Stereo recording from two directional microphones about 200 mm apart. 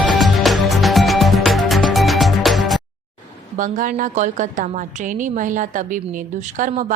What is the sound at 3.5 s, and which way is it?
A woman's voice, 40° right (ahead or behind).